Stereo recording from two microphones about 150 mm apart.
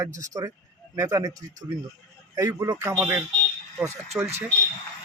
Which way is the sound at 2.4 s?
25° right (ahead or behind).